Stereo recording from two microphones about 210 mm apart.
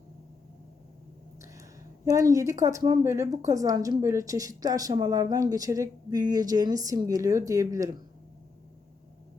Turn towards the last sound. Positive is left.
turn(degrees=-15)  # may be behind; listen again after turning